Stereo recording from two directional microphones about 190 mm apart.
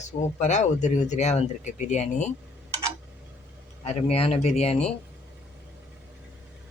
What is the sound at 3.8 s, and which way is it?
Speech, 30° left (ahead or behind).